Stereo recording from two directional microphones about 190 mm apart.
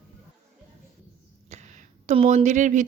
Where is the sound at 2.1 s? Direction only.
35° right (ahead or behind).